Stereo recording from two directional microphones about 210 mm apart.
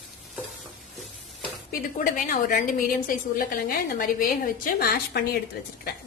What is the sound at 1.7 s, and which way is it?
A woman's voice, 40° left (ahead or behind).